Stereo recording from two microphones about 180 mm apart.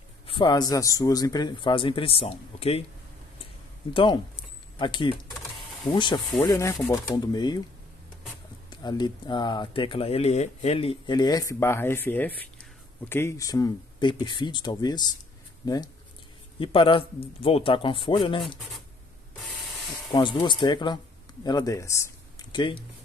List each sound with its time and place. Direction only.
0.3 s speech: 25° left (ahead or behind)
3.9 s speech: 25° left (ahead or behind)
8.6 s speech: 25° left (ahead or behind)
18.4 s speech: centre (ahead or behind)
19.3 s sanding: centre (ahead or behind)
20.1 s speech: 25° left (ahead or behind)
22.5 s speech: 25° left (ahead or behind)